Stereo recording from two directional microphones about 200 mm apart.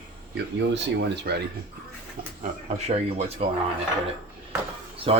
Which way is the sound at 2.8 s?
30° right (ahead or behind).